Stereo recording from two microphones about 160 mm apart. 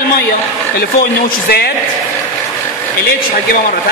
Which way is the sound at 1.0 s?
90° left.